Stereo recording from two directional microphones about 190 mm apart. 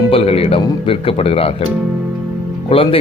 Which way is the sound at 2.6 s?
30° left (ahead or behind).